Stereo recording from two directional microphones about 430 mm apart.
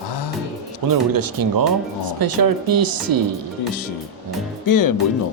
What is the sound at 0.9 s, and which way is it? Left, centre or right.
Speech, right.